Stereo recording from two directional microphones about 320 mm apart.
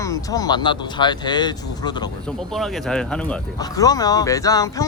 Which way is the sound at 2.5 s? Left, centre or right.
Centre.